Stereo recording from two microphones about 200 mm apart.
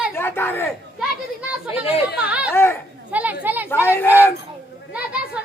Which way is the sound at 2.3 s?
5° right (ahead or behind).